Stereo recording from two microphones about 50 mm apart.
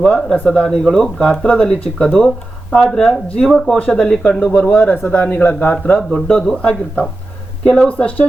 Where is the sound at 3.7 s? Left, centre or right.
Left.